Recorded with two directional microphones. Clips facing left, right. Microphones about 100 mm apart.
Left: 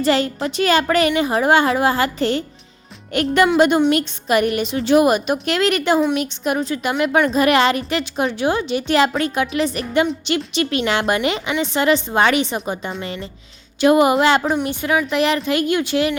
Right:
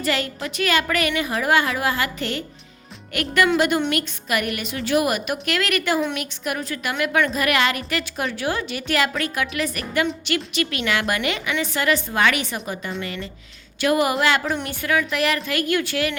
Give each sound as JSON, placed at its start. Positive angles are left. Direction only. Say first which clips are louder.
{"t": 0.0, "sound": "a woman's voice", "louder": "left 7 dB", "side_deg": 30}